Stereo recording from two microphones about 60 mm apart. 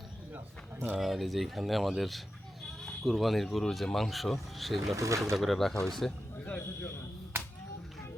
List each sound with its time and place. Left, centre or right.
0.9 s speech: centre
4.9 s speech: right
5.3 s a man's voice: centre
6.4 s speech: left